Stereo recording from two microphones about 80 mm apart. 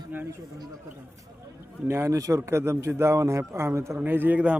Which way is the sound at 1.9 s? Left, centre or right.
Right.